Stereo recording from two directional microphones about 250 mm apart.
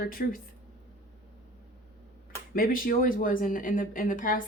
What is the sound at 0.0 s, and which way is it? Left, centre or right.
Speech, left.